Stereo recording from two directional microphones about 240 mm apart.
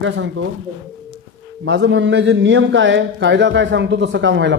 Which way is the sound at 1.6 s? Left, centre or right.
Right.